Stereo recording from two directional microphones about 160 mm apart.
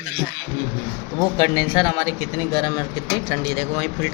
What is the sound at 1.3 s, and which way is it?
Speech, 20° left (ahead or behind).